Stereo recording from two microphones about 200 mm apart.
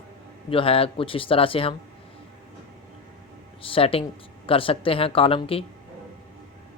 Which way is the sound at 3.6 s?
25° left (ahead or behind).